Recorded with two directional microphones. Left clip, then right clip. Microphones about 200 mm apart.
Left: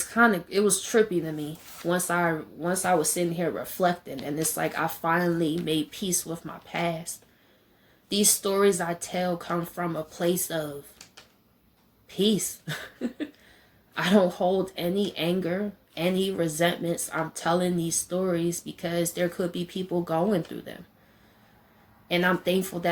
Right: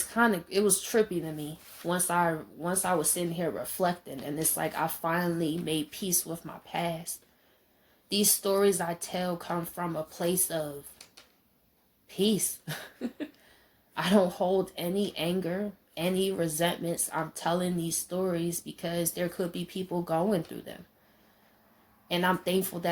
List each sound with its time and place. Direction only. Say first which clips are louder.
0.1 s speech: left 4 dB; 15° right (ahead or behind)
8.1 s speech: left 2 dB; 15° right (ahead or behind)
12.0 s speech: left 3 dB; 15° right (ahead or behind)
22.1 s speech: left 3 dB; 20° right (ahead or behind)